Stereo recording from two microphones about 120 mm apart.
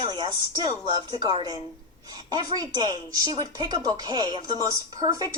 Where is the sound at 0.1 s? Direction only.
40° right (ahead or behind).